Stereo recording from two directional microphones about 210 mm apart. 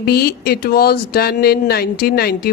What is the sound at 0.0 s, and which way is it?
Speech, 45° left (ahead or behind).